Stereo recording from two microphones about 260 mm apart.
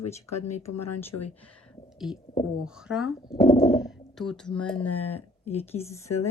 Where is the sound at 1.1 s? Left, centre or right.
Left.